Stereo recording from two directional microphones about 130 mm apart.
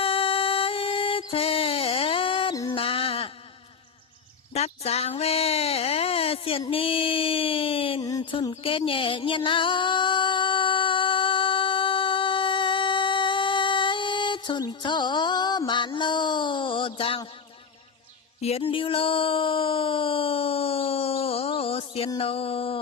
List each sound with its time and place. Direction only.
0.0 s music: 45° left (ahead or behind)
2.6 s a sound: 45° left (ahead or behind)
4.5 s speech: 55° left (ahead or behind)
6.7 s female singing: 45° left (ahead or behind)
8.2 s music: 40° left (ahead or behind)
18.3 s music: 50° left (ahead or behind)
22.2 s a sound: 45° left (ahead or behind)